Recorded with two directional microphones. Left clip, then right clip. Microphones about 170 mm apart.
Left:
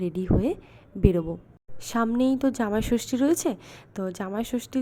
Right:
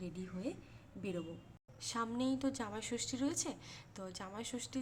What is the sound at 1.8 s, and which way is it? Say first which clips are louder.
A woman's voice: left 14 dB; 40° left (ahead or behind).